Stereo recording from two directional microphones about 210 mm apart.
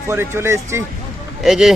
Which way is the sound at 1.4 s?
Centre (ahead or behind).